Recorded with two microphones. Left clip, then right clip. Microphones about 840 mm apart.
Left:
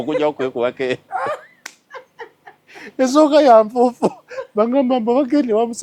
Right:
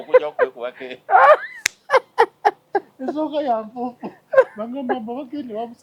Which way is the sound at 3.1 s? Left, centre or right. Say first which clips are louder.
Left 11 dB; left.